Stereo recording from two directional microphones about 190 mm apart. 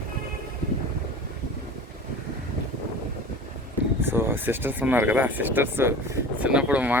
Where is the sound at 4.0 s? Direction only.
10° right (ahead or behind).